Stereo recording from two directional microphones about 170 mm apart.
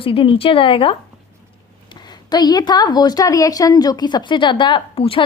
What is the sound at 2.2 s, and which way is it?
A woman's voice, 25° left (ahead or behind).